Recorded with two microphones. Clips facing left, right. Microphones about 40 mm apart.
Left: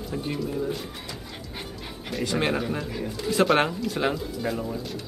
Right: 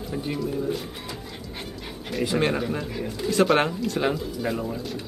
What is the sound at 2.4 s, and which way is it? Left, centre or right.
Speech, centre.